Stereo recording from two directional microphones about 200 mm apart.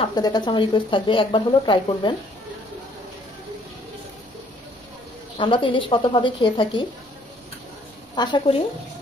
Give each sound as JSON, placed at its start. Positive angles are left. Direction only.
{"t": 0.0, "sound": "speech", "side_deg": 20}
{"t": 5.4, "sound": "speech", "side_deg": 25}
{"t": 8.2, "sound": "speech", "side_deg": 25}